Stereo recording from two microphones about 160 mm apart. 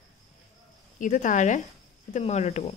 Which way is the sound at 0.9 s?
55° left (ahead or behind).